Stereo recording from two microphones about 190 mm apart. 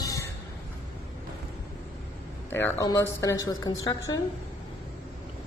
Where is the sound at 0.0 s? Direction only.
15° left (ahead or behind).